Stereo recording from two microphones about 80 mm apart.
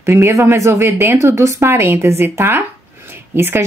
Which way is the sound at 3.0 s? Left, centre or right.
Right.